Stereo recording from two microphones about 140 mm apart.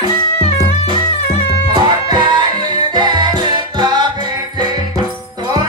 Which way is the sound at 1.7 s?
30° right (ahead or behind).